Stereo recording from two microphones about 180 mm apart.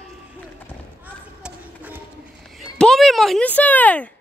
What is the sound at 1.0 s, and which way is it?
Basketball bounce, 10° right (ahead or behind).